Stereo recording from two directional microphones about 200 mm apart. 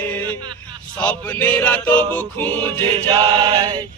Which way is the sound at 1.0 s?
5° left (ahead or behind).